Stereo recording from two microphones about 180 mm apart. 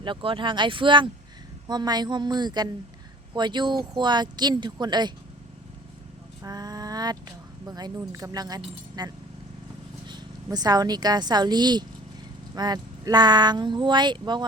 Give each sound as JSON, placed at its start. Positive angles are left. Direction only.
{"t": 0.0, "sound": "speech", "side_deg": -30}
{"t": 6.4, "sound": "speech", "side_deg": -20}